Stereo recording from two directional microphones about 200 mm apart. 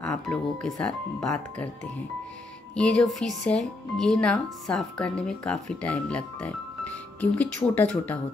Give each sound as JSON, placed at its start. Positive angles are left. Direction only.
{"t": 0.0, "sound": "speech", "side_deg": 5}
{"t": 2.7, "sound": "speech", "side_deg": 5}